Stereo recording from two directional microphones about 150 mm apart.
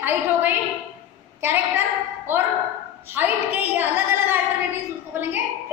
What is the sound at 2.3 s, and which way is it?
A woman's voice, 15° right (ahead or behind).